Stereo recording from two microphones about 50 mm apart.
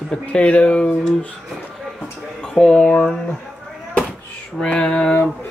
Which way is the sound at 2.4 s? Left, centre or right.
Centre.